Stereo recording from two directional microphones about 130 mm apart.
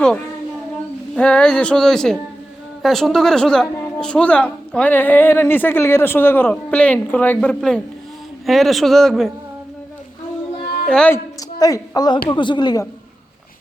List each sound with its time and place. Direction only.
1.1 s a woman's voice: 10° left (ahead or behind)
10.8 s speech: 5° left (ahead or behind)
11.6 s a woman's voice: 30° left (ahead or behind)